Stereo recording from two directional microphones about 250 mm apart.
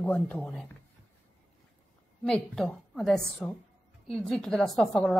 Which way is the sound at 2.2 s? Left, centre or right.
Centre.